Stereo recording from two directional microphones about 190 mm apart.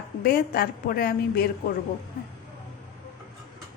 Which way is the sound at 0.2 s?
50° left (ahead or behind).